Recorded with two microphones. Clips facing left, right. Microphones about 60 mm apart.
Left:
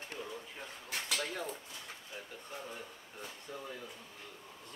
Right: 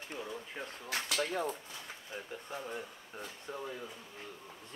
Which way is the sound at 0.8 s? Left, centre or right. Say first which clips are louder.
Right 3 dB; right.